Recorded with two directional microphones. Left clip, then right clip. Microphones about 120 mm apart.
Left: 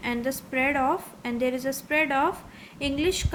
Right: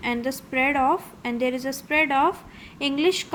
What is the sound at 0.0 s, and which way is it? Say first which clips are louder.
A woman's voice: right 2 dB; 20° right (ahead or behind).